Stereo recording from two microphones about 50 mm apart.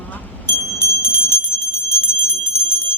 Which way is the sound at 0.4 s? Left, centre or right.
Left.